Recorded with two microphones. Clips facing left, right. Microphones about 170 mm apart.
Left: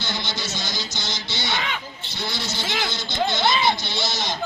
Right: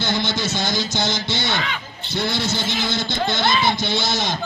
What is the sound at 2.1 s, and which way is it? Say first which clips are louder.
Speech: right 8 dB; 55° right (ahead or behind).